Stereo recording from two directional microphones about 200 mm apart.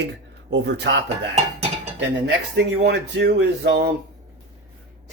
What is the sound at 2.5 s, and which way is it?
Speech, 60° right (ahead or behind).